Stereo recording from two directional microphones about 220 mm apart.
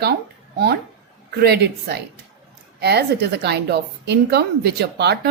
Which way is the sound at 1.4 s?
45° right (ahead or behind).